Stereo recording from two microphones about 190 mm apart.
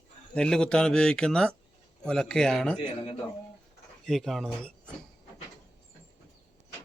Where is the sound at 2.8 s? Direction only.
25° left (ahead or behind).